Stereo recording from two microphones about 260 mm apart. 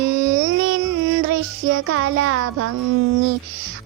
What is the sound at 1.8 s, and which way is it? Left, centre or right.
Speech, right.